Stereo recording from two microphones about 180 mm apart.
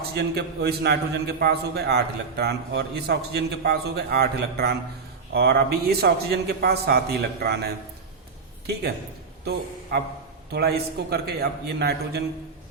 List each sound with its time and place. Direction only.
0.1 s a man's voice: 65° right (ahead or behind)
9.4 s a man's voice: 65° right (ahead or behind)